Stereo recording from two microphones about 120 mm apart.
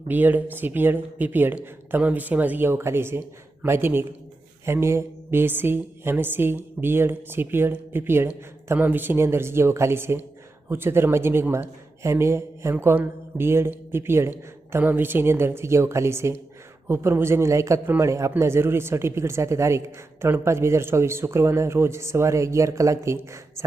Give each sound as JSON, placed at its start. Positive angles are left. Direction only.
{"t": 0.1, "sound": "speech", "side_deg": -15}